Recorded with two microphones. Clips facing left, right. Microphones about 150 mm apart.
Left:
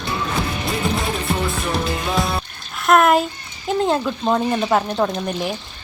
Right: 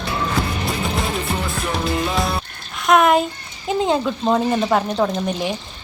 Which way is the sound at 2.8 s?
Centre (ahead or behind).